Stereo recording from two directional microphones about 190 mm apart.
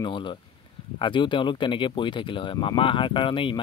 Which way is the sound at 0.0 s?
25° left (ahead or behind).